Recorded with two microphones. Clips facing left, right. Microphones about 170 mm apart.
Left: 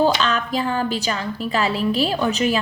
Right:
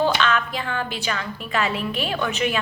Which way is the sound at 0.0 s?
35° left (ahead or behind).